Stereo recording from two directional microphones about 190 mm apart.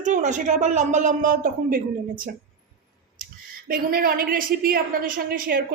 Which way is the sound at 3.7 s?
50° right (ahead or behind).